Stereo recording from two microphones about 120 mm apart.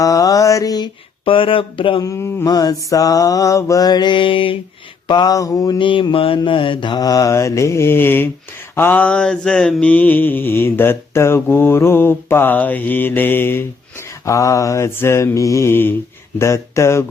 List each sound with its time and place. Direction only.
0.0 s mantra: 30° left (ahead or behind)
1.2 s speech: 50° left (ahead or behind)
2.0 s mantra: 25° left (ahead or behind); by 4.5 s 45° left (ahead or behind)
5.0 s mantra: 35° left (ahead or behind)